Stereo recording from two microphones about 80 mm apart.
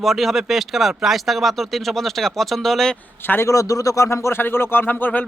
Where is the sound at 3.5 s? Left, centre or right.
Left.